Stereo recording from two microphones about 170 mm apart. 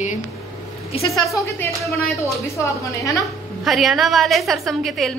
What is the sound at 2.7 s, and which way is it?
Speech, 20° left (ahead or behind).